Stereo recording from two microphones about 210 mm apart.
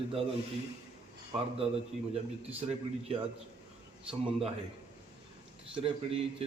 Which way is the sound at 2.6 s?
30° right (ahead or behind).